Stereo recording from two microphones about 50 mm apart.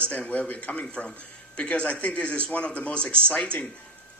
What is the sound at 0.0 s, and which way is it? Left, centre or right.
Speech, left.